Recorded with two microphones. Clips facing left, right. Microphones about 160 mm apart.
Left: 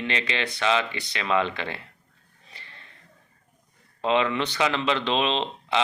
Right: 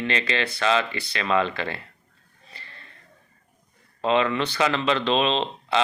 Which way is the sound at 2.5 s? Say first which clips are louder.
Right 2 dB; 15° left (ahead or behind).